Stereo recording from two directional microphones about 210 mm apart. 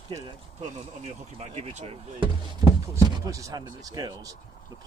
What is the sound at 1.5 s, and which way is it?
Speech, 30° right (ahead or behind).